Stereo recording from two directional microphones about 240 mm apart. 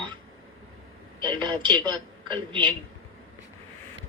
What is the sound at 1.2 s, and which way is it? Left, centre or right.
Speech, centre.